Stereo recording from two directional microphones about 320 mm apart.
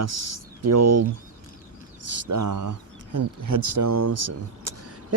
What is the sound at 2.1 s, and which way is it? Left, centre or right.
Speech, right.